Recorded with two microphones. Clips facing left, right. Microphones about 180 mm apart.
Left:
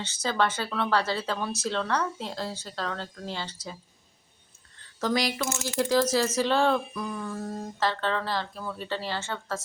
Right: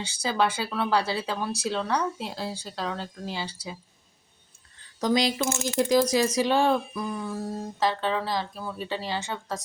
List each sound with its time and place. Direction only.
0.0 s speech: 10° right (ahead or behind)
4.9 s speech: 20° right (ahead or behind)